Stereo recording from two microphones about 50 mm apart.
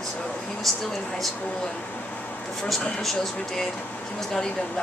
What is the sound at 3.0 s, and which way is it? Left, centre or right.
Speech, centre.